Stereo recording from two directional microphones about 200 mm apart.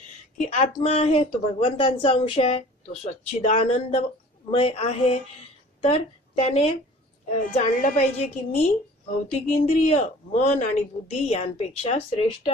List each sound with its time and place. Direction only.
0.4 s a woman's voice: 40° left (ahead or behind)
9.3 s speech: 35° left (ahead or behind)